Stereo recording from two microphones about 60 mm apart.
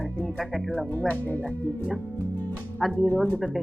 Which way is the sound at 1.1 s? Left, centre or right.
Left.